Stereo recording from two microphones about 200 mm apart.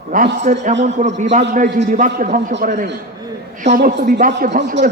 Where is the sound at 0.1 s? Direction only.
40° right (ahead or behind).